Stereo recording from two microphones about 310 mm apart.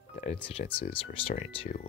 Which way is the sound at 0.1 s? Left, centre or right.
Left.